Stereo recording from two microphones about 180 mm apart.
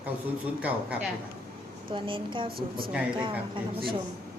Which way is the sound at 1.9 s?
30° right (ahead or behind).